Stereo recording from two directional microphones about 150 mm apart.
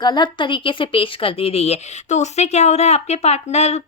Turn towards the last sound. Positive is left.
turn(degrees=50)  # may be behind; listen again after turning